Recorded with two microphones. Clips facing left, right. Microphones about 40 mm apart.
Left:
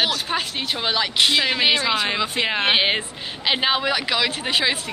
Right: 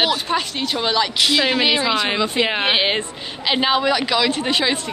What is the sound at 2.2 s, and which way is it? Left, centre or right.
Speech, centre.